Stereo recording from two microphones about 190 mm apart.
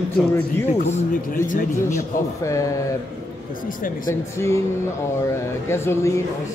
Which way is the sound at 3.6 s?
45° left (ahead or behind).